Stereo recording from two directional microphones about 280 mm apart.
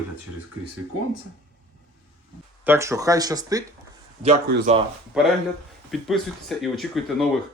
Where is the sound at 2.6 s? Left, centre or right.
Centre.